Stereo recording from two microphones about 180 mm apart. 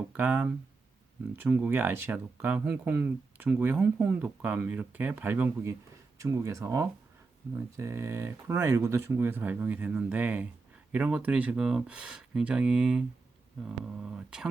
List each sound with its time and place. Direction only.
0.1 s speech: 10° right (ahead or behind)